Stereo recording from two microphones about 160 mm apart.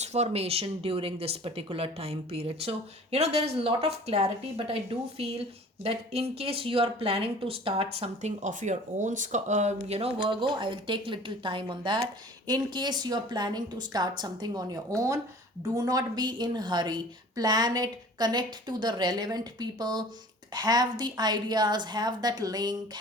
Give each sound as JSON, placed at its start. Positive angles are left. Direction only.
{"t": 0.0, "sound": "a woman's voice", "side_deg": -40}